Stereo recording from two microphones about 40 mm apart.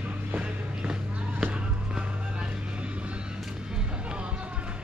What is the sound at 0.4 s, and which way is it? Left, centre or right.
Music, right.